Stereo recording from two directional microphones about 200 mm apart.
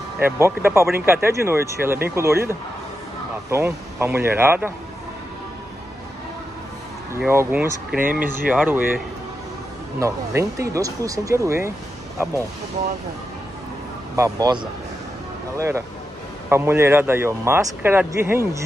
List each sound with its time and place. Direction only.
0.2 s a man's voice: 10° right (ahead or behind)
7.2 s a man's voice: 10° right (ahead or behind)
9.9 s a man's voice: 15° right (ahead or behind)
14.1 s a man's voice: 15° right (ahead or behind)